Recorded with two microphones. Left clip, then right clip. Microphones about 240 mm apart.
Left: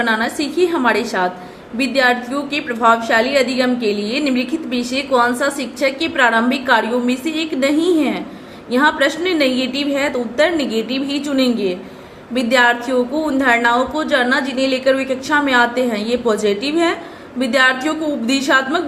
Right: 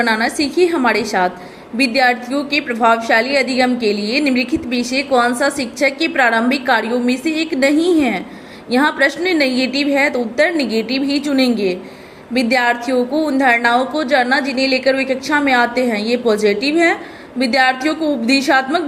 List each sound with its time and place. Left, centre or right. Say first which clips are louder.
0.0 s a woman's voice: right 2 dB; right